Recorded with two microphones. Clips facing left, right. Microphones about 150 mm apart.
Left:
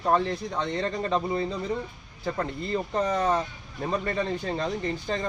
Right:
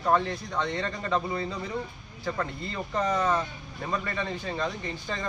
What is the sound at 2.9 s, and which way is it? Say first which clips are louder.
Speech: even; 30° left (ahead or behind).